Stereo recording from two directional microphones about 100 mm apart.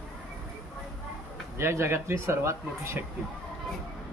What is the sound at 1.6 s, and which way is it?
A man's voice, 25° right (ahead or behind).